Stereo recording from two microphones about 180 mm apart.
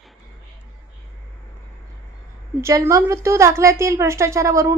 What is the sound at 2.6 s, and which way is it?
A woman's voice, 15° right (ahead or behind).